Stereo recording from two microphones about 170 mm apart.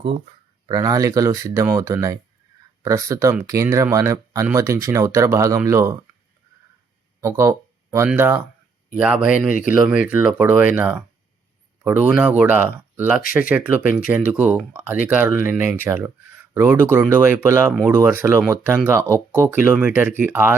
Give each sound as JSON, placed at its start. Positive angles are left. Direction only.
{"t": 0.7, "sound": "speech", "side_deg": -20}
{"t": 7.2, "sound": "speech", "side_deg": -15}